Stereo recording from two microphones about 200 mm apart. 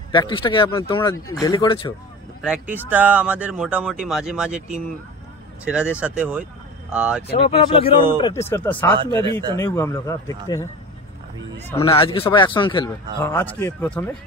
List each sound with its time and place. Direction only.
0.1 s speech: 25° left (ahead or behind)
2.4 s speech: 5° right (ahead or behind)
5.7 s speech: 5° right (ahead or behind)
7.4 s speech: 30° left (ahead or behind)
8.2 s speech: 15° left (ahead or behind)
9.0 s speech: 25° right (ahead or behind)
9.6 s speech: 15° left (ahead or behind)
11.8 s speech: 25° left (ahead or behind)
13.2 s speech: 10° left (ahead or behind)